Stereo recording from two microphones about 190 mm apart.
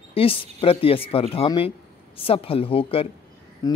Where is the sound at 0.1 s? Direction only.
30° left (ahead or behind).